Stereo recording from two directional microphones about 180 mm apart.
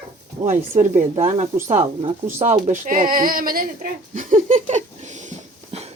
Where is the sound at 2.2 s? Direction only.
45° right (ahead or behind).